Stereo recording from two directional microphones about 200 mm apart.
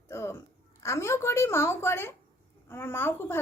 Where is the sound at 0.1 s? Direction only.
15° left (ahead or behind).